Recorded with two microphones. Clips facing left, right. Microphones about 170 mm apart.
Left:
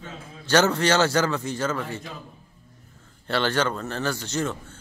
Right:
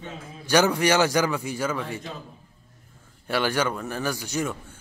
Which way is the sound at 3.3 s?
10° right (ahead or behind).